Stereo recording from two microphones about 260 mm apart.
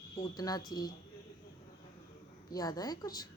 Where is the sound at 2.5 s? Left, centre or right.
Centre.